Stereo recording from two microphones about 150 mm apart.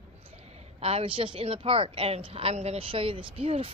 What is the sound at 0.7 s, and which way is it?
A woman's voice, 40° right (ahead or behind).